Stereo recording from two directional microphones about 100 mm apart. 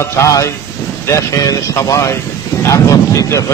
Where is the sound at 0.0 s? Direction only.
30° left (ahead or behind).